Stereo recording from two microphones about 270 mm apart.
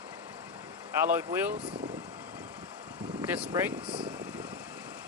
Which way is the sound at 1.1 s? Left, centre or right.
Centre.